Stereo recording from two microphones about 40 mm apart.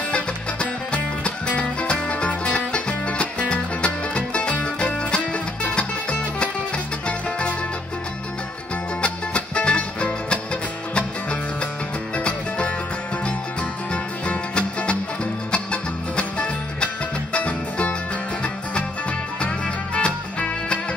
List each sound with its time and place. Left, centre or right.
0.1 s music: left
9.0 s music: left